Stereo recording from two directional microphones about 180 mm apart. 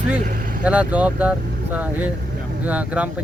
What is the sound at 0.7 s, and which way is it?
Speech, 10° right (ahead or behind).